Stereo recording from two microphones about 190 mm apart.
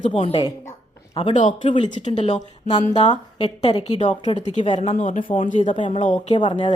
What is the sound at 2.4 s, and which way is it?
Speech, 20° left (ahead or behind).